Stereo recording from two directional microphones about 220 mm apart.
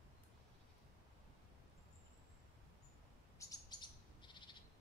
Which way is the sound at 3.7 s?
20° left (ahead or behind).